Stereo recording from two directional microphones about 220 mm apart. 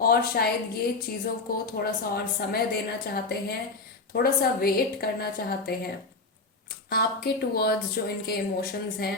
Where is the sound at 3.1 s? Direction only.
45° left (ahead or behind).